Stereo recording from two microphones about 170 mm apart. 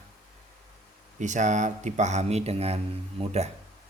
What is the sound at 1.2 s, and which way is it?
Speech, 45° right (ahead or behind).